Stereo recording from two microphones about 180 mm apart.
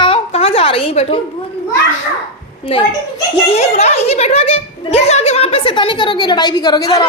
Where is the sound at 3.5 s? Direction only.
35° left (ahead or behind).